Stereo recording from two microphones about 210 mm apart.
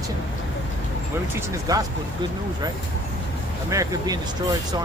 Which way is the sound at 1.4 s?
15° right (ahead or behind).